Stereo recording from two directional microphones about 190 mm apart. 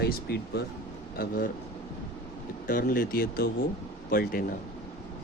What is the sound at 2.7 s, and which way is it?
Speech, 50° left (ahead or behind).